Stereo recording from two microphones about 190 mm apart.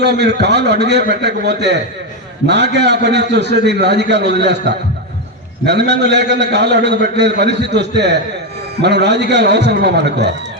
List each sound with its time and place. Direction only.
0.0 s a man's voice: 60° right (ahead or behind)